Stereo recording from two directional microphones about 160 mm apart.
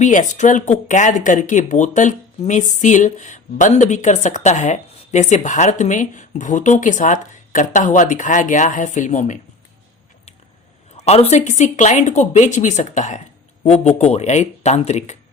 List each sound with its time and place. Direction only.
0.0 s speech: 50° left (ahead or behind)
10.9 s speech: 40° left (ahead or behind)